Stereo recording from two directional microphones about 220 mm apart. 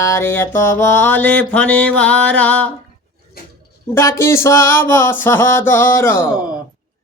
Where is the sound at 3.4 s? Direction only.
40° left (ahead or behind).